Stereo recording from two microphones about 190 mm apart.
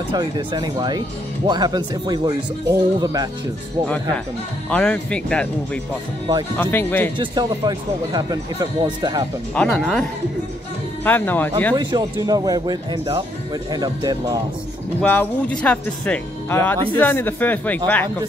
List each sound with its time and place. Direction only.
0.1 s speech: 20° right (ahead or behind)
3.8 s speech: 5° left (ahead or behind)
6.5 s speech: 10° left (ahead or behind)
7.2 s speech: 20° right (ahead or behind)
9.6 s speech: 5° left (ahead or behind)
11.1 s speech: 10° left (ahead or behind)
11.7 s speech: 20° right (ahead or behind)
15.0 s speech: 5° left (ahead or behind)